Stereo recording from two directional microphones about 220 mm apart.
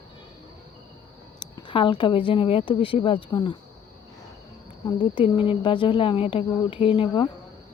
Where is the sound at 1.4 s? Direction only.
20° left (ahead or behind).